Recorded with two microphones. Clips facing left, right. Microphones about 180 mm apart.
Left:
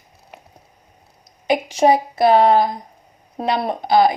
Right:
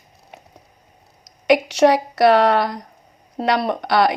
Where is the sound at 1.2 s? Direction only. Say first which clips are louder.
Right 4 dB; 75° right (ahead or behind).